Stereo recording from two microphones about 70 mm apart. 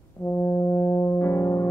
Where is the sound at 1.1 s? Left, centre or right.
Left.